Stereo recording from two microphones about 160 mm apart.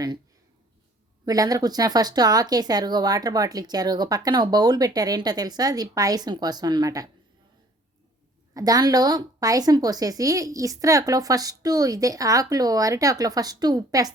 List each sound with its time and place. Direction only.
1.2 s speech: 25° right (ahead or behind)
8.5 s speech: 25° right (ahead or behind)